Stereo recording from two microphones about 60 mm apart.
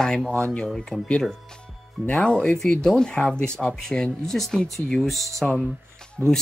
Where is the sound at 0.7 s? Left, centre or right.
Centre.